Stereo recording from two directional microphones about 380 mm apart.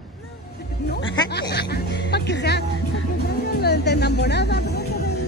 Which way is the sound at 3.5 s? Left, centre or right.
Left.